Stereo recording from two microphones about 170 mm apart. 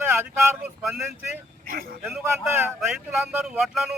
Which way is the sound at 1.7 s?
60° right (ahead or behind).